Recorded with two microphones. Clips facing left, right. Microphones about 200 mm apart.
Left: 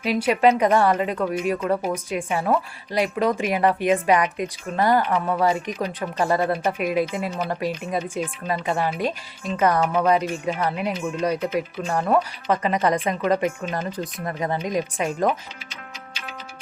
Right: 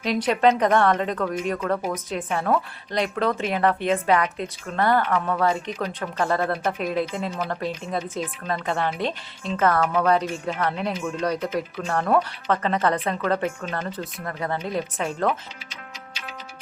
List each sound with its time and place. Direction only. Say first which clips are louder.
0.0 s speech: left 1 dB; 5° left (ahead or behind)
15.7 s music: left 1 dB; 55° left (ahead or behind)